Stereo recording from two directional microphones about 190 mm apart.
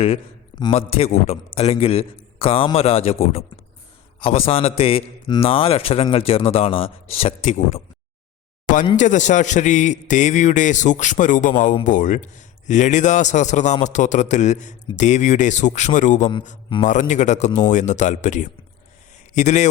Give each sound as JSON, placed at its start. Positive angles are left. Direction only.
{"t": 0.6, "sound": "a man's voice", "side_deg": 30}
{"t": 8.6, "sound": "a sound", "side_deg": 45}
{"t": 9.0, "sound": "a man's voice", "side_deg": 40}